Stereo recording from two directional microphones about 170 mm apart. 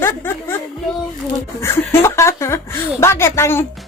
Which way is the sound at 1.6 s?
15° left (ahead or behind).